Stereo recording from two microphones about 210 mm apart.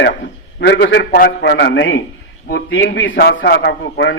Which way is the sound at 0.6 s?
55° left (ahead or behind).